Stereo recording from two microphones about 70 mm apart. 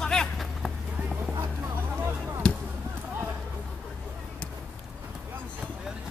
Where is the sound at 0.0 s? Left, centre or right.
Centre.